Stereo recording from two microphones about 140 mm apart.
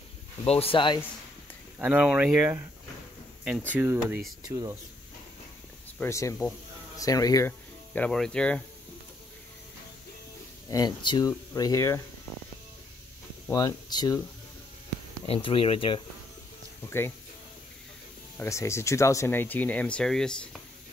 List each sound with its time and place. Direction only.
0.5 s speech: 45° left (ahead or behind)
1.8 s speech: 10° right (ahead or behind)
3.7 s speech: 15° right (ahead or behind)
4.4 s speech: 30° right (ahead or behind)
5.9 s speech: 20° left (ahead or behind)
7.9 s speech: 5° left (ahead or behind)
10.7 s speech: 30° left (ahead or behind)
13.5 s speech: 30° left (ahead or behind)
15.2 s speech: 40° left (ahead or behind)
16.8 s speech: 15° left (ahead or behind)
18.4 s speech: 20° left (ahead or behind); by 20.3 s 5° left (ahead or behind)